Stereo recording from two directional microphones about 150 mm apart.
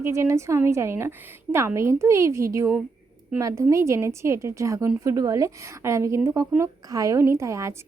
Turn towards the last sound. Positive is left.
turn(degrees=-20)  # may be behind; listen again after turning